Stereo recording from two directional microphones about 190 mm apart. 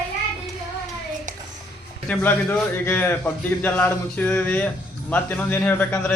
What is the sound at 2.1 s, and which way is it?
A man's voice, 10° left (ahead or behind).